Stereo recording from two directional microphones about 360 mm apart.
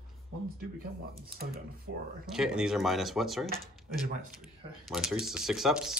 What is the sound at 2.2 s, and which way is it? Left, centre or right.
Speech, centre.